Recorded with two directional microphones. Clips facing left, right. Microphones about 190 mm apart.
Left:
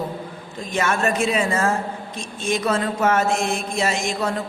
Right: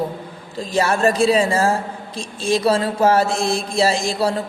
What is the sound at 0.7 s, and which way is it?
Mantra, 35° right (ahead or behind).